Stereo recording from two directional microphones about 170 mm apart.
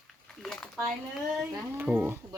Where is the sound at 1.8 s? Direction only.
10° right (ahead or behind).